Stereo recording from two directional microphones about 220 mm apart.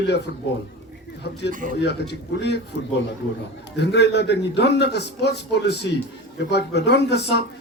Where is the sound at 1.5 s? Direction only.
35° right (ahead or behind).